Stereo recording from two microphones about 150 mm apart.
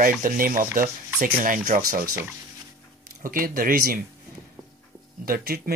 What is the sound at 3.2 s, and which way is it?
Speech, 70° right (ahead or behind).